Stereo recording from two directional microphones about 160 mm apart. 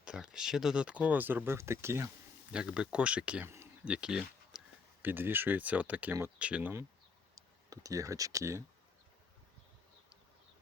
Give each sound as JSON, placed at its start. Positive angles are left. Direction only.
{"t": 0.0, "sound": "speech", "side_deg": -5}
{"t": 2.5, "sound": "speech", "side_deg": -5}
{"t": 7.3, "sound": "speech", "side_deg": -20}